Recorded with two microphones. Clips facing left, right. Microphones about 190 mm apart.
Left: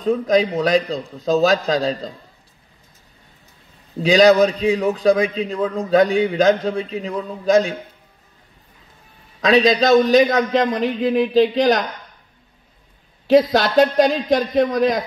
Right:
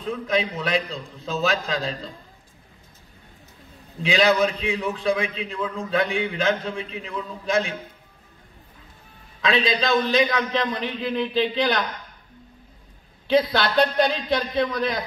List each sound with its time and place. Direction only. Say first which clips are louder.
0.0 s a man's voice: left 8 dB; 40° left (ahead or behind)
4.0 s a man's voice: left 7 dB; 40° left (ahead or behind)
9.4 s a man's voice: left 8 dB; 40° left (ahead or behind)
13.3 s speech: left 6 dB; 45° left (ahead or behind)